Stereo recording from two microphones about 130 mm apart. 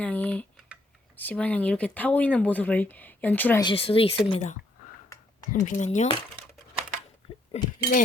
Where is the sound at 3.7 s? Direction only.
45° left (ahead or behind).